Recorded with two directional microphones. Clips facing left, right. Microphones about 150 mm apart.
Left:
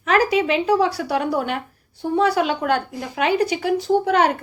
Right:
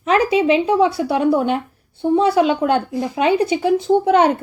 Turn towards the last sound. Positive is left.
turn(degrees=-25)  # may be behind; listen again after turning